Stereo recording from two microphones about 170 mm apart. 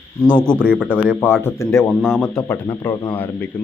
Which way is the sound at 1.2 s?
15° left (ahead or behind).